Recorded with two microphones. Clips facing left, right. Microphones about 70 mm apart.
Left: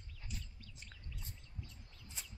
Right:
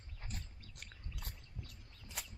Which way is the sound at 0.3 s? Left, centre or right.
Right.